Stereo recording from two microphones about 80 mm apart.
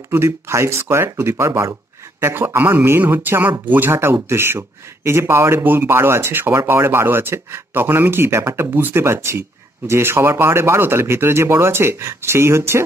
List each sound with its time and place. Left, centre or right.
0.1 s speech: right
2.1 s speech: right